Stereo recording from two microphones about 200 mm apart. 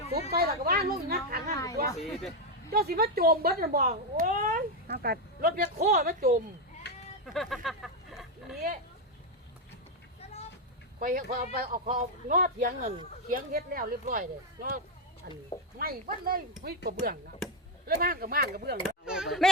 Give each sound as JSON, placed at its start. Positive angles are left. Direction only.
{"t": 0.1, "sound": "speech", "side_deg": -50}
{"t": 1.5, "sound": "speech", "side_deg": 15}
{"t": 2.6, "sound": "speech", "side_deg": -50}
{"t": 5.7, "sound": "speech", "side_deg": -35}
{"t": 6.8, "sound": "a sound", "side_deg": 55}
{"t": 7.3, "sound": "speech", "side_deg": 0}
{"t": 11.0, "sound": "speech", "side_deg": -45}
{"t": 18.8, "sound": "speech", "side_deg": -5}